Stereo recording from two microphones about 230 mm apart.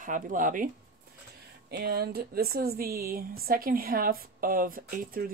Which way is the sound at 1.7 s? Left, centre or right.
Right.